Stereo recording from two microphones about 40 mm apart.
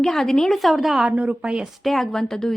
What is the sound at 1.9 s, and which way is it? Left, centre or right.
Speech, centre.